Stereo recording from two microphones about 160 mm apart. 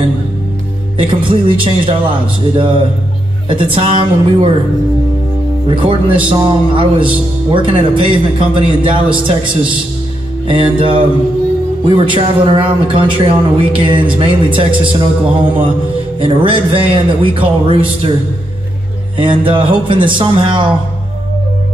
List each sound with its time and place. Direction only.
0.9 s a man's voice: 30° right (ahead or behind)
5.7 s a man's voice: 30° right (ahead or behind)
19.1 s a man's voice: 30° right (ahead or behind)